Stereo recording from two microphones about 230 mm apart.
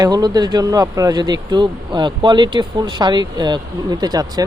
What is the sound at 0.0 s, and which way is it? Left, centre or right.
Speech, centre.